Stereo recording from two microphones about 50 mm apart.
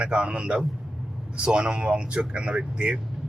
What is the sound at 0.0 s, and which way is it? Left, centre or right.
A man's voice, right.